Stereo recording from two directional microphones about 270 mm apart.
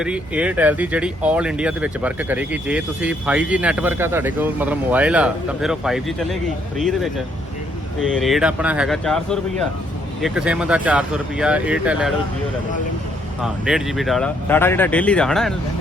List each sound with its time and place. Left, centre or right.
0.0 s speech: centre
13.4 s speech: centre